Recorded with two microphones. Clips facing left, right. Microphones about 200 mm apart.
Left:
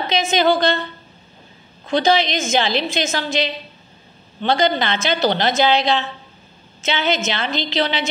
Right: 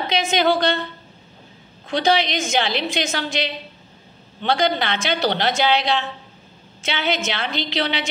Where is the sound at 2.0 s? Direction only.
10° right (ahead or behind).